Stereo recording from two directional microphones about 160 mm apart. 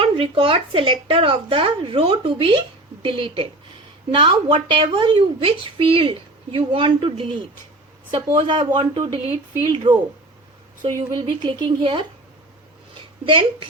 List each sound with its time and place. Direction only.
0.0 s speech: 35° right (ahead or behind)
13.2 s speech: 35° right (ahead or behind)